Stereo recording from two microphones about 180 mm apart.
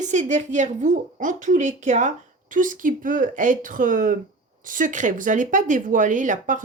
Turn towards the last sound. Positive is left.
turn(degrees=-45)  # may be behind; listen again after turning